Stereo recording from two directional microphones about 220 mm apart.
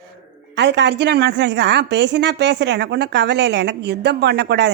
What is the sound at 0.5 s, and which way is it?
A woman's voice, 50° right (ahead or behind).